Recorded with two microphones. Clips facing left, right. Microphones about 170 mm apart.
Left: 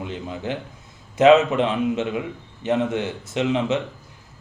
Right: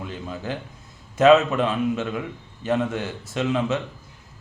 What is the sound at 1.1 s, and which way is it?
Speech, 20° left (ahead or behind).